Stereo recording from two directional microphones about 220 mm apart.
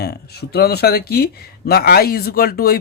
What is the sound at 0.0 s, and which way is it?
Speech, 45° left (ahead or behind).